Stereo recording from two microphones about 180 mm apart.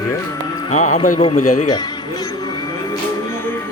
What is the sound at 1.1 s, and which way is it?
Speech, 30° left (ahead or behind).